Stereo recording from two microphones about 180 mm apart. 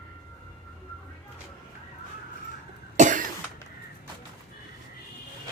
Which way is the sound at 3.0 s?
45° right (ahead or behind).